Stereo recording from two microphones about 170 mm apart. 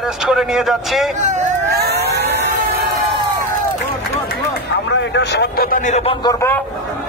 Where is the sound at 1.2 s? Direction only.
45° right (ahead or behind).